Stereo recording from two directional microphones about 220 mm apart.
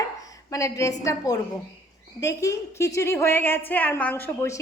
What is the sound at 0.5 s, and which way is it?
A woman's voice, 15° left (ahead or behind).